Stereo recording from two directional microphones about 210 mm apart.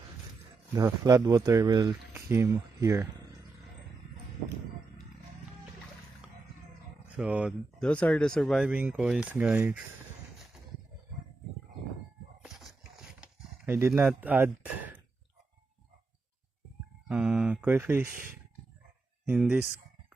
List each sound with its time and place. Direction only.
0.7 s speech: 15° right (ahead or behind)
7.2 s speech: 5° right (ahead or behind)
7.8 s speech: 5° left (ahead or behind)
12.4 s clip-clop: centre (ahead or behind)
17.1 s speech: 5° right (ahead or behind)
19.2 s speech: 5° right (ahead or behind)